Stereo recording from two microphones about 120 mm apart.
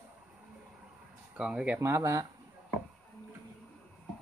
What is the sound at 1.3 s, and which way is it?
Speech, 5° right (ahead or behind).